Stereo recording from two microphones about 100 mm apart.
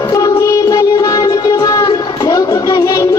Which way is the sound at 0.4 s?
35° left (ahead or behind).